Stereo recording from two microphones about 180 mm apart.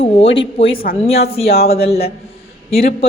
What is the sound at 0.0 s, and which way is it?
A man's voice, 30° left (ahead or behind).